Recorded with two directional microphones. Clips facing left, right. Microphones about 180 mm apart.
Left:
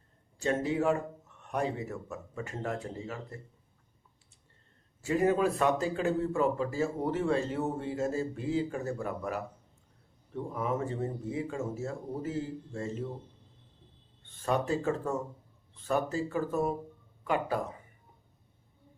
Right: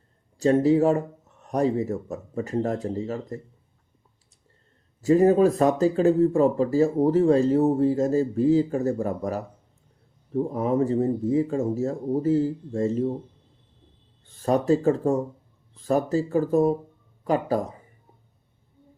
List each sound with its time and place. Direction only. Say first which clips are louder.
0.3 s speech: right 11 dB; 35° right (ahead or behind)
5.0 s speech: right 9 dB; 40° right (ahead or behind)
14.3 s speech: right 9 dB; 35° right (ahead or behind)